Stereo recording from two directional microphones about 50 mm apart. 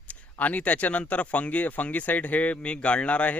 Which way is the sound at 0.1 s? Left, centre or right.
Left.